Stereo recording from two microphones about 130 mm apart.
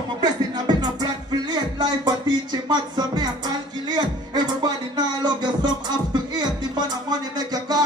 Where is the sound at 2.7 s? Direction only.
35° right (ahead or behind).